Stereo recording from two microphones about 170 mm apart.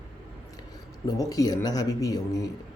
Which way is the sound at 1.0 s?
20° left (ahead or behind).